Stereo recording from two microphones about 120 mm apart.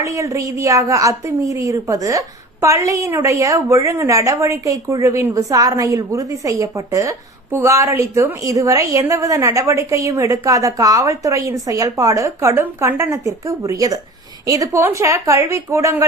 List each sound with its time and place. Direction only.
0.0 s a woman's voice: 25° right (ahead or behind)